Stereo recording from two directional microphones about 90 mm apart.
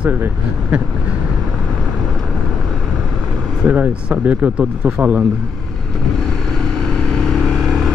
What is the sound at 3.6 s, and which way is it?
Speech, 15° right (ahead or behind).